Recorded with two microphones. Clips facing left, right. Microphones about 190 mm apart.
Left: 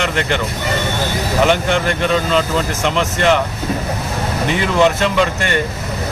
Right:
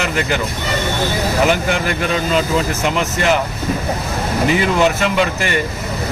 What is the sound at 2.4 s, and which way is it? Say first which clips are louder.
Speech: even; 5° right (ahead or behind).